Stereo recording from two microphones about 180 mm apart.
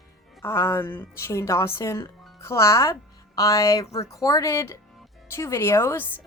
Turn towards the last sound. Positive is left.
turn(degrees=15)  # may be behind; listen again after turning